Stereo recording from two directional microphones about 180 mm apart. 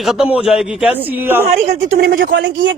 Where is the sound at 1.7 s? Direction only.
45° right (ahead or behind).